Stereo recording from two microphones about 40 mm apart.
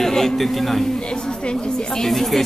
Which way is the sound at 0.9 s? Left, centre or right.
Left.